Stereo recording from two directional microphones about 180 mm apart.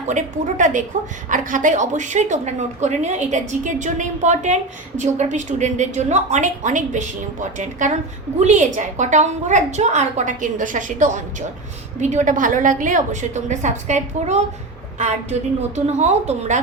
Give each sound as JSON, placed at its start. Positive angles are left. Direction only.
{"t": 0.1, "sound": "a woman's voice", "side_deg": -45}